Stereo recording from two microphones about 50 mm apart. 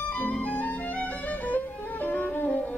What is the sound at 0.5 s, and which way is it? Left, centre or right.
Music, left.